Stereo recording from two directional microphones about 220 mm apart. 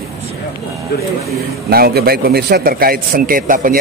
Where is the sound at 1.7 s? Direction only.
45° right (ahead or behind).